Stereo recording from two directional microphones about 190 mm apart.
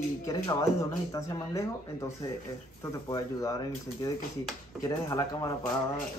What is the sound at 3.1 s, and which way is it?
Speech, 20° left (ahead or behind).